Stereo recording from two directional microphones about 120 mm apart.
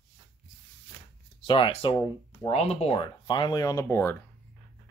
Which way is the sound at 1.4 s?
45° left (ahead or behind).